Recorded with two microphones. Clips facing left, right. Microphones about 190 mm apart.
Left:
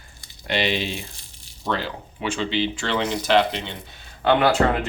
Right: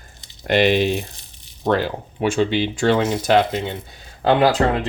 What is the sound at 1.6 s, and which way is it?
Speech, 45° right (ahead or behind).